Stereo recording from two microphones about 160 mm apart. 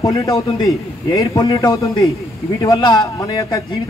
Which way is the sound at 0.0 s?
25° left (ahead or behind).